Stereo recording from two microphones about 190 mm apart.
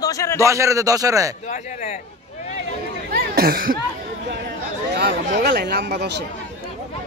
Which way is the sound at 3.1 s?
50° right (ahead or behind).